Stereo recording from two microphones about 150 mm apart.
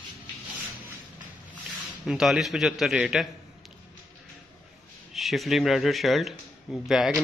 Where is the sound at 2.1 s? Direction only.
5° right (ahead or behind).